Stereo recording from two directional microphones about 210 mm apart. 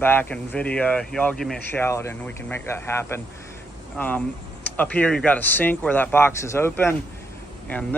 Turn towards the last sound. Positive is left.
turn(degrees=5)  # may be behind; listen again after turning